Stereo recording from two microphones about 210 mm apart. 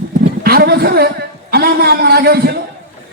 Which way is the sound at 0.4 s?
45° right (ahead or behind).